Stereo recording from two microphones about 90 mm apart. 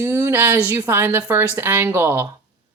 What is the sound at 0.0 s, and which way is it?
A woman's voice, 30° right (ahead or behind).